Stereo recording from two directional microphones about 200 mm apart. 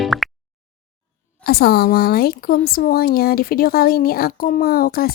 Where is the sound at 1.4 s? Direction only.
50° left (ahead or behind).